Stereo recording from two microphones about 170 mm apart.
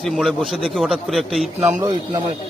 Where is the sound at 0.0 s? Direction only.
Centre (ahead or behind).